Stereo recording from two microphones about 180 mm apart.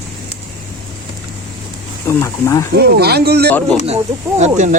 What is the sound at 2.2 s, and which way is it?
Speech, 15° left (ahead or behind).